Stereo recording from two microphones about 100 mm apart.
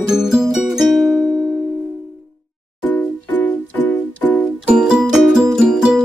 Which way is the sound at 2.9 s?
15° left (ahead or behind).